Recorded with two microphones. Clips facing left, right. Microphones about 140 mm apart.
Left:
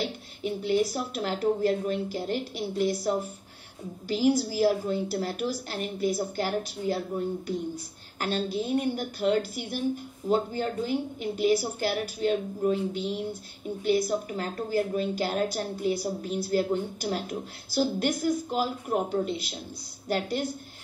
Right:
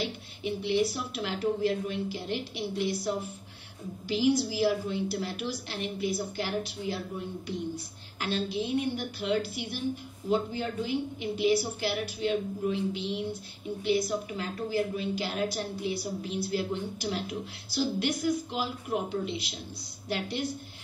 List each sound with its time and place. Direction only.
0.0 s a woman's voice: 45° left (ahead or behind)